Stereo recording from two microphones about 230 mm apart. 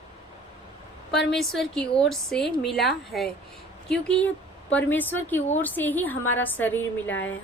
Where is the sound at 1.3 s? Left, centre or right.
Centre.